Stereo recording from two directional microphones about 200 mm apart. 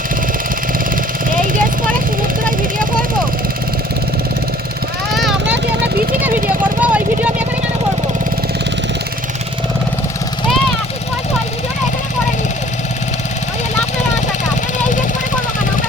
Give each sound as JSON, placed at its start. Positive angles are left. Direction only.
{"t": 1.3, "sound": "vehicle", "side_deg": -45}
{"t": 5.1, "sound": "vehicle", "side_deg": 0}
{"t": 6.8, "sound": "vehicle", "side_deg": -5}